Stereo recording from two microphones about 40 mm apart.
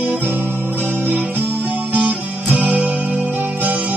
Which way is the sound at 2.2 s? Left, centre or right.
Right.